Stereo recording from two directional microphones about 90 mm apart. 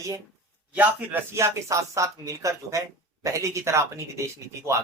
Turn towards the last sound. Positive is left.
turn(degrees=-30)  # may be behind; listen again after turning